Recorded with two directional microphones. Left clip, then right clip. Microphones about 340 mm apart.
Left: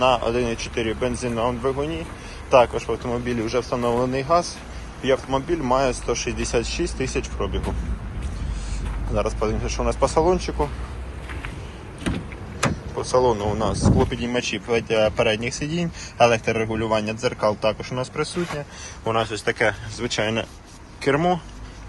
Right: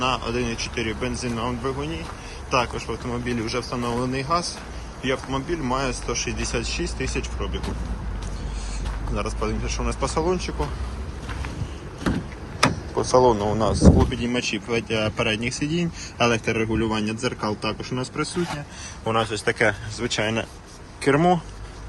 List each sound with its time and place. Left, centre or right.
0.0 s a man's voice: centre
9.1 s a man's voice: centre
13.1 s a man's voice: centre